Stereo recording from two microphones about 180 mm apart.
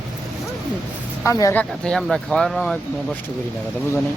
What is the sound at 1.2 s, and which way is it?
Speech, 15° left (ahead or behind).